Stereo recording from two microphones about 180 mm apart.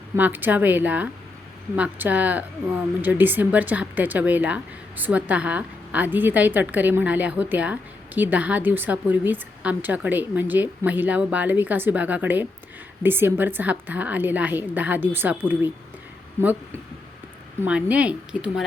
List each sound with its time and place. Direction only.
0.2 s speech: 10° right (ahead or behind)
17.6 s speech: 5° right (ahead or behind)